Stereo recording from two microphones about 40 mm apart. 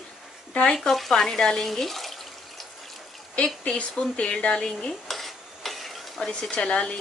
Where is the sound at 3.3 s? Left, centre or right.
Left.